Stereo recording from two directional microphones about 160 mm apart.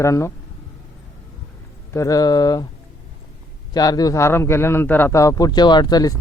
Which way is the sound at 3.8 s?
25° left (ahead or behind).